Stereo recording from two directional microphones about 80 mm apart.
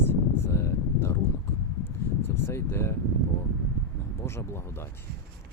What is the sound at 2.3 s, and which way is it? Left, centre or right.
Speech, left.